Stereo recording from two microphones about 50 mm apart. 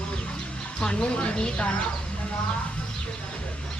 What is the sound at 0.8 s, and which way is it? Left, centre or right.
Speech, centre.